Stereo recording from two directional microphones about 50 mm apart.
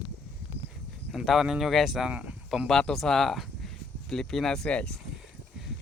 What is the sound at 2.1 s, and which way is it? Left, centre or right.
Speech, right.